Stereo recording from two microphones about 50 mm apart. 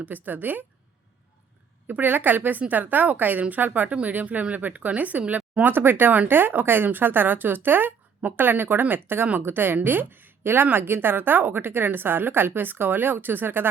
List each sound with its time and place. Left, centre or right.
0.0 s a woman's voice: right
1.9 s a woman's voice: right